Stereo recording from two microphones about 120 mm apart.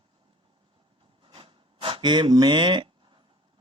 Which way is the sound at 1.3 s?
50° right (ahead or behind).